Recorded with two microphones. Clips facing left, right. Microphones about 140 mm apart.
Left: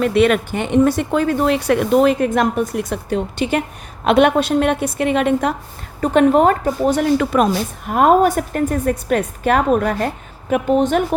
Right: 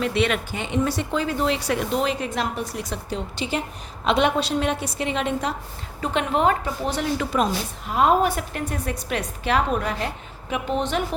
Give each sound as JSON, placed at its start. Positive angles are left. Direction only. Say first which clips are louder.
{"t": 0.0, "sound": "speech", "louder": "left 8 dB", "side_deg": 50}
{"t": 6.0, "sound": "a woman's voice", "louder": "left 9 dB", "side_deg": 45}